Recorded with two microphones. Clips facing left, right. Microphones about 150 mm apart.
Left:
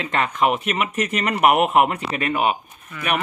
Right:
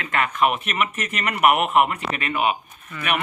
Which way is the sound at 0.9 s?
35° left (ahead or behind).